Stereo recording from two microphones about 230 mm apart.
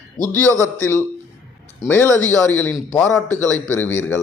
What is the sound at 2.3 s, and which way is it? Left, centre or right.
Speech, centre.